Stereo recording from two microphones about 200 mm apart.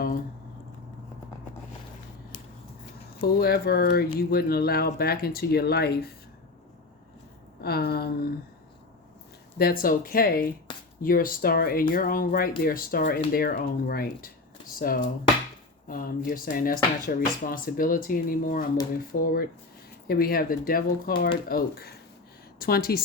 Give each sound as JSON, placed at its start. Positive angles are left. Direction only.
{"t": 3.2, "sound": "speech", "side_deg": 50}
{"t": 7.6, "sound": "speech", "side_deg": 50}
{"t": 9.8, "sound": "speech", "side_deg": 45}